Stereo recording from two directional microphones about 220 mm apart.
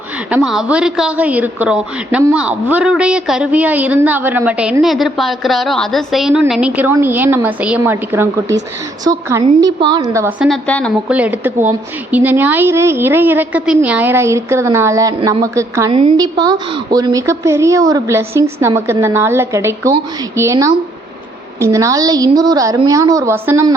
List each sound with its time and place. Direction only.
0.3 s a woman's voice: 5° right (ahead or behind)
11.1 s a woman's voice: 5° right (ahead or behind)